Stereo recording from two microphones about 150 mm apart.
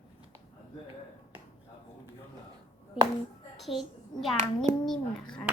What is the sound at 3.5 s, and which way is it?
Speech, centre (ahead or behind).